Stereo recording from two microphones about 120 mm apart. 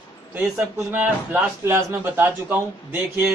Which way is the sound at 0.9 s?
15° right (ahead or behind).